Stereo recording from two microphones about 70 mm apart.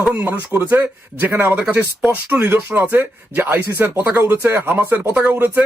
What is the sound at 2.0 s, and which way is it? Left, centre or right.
Speech, centre.